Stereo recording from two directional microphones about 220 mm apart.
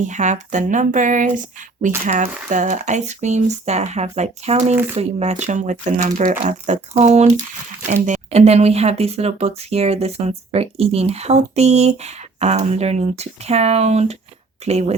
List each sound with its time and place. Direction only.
0.0 s speech: 35° right (ahead or behind)